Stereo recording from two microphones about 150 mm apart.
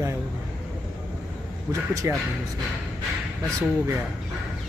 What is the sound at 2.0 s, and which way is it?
Speech, 20° right (ahead or behind).